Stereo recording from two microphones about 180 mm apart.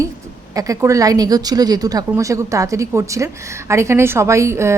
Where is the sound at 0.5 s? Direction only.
20° right (ahead or behind).